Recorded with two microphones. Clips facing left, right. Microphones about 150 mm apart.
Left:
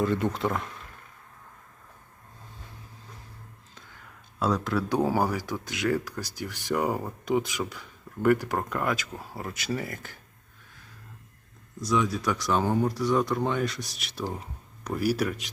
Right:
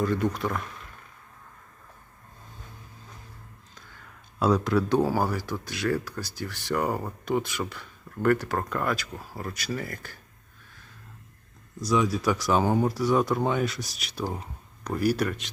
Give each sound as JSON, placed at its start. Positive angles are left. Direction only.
{"t": 0.0, "sound": "speech", "side_deg": 25}
{"t": 4.4, "sound": "speech", "side_deg": 0}
{"t": 4.9, "sound": "speech", "side_deg": 15}
{"t": 11.8, "sound": "speech", "side_deg": 0}